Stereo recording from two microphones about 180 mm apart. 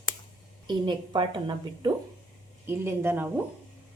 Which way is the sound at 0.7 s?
25° right (ahead or behind).